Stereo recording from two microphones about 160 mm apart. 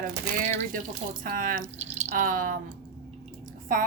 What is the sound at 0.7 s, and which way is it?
Speech, 60° right (ahead or behind).